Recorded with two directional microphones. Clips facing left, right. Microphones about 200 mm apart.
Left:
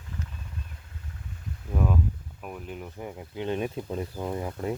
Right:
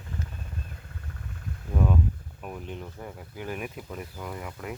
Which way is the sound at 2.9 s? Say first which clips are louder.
Left 4 dB; 20° left (ahead or behind).